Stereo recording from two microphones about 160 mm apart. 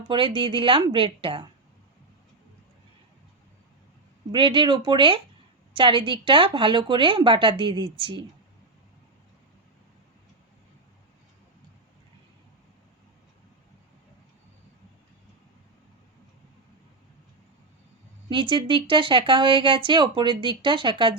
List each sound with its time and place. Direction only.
0.1 s speech: 30° right (ahead or behind)
4.3 s speech: 30° right (ahead or behind)
18.3 s speech: 30° right (ahead or behind)